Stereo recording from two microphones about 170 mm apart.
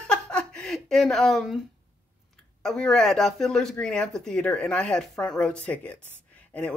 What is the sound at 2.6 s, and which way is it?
Speech, 5° left (ahead or behind).